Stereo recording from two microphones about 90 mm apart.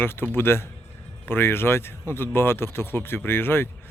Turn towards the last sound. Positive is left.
turn(degrees=25)  # may be behind; listen again after turning